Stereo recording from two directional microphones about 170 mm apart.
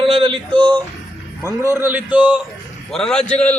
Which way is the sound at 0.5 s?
10° left (ahead or behind).